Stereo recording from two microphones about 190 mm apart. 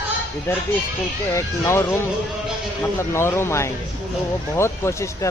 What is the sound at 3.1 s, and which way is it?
Speech, 15° left (ahead or behind).